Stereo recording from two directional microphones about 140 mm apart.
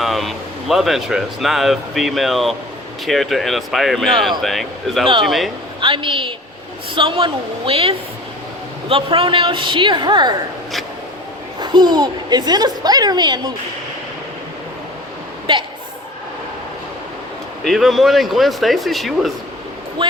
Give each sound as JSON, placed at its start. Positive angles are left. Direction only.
{"t": 0.0, "sound": "speech", "side_deg": 0}
{"t": 5.8, "sound": "a woman's voice", "side_deg": -40}
{"t": 11.6, "sound": "a woman's voice", "side_deg": -30}
{"t": 15.5, "sound": "a woman's voice", "side_deg": -35}
{"t": 17.6, "sound": "speech", "side_deg": 0}
{"t": 20.0, "sound": "speech", "side_deg": -35}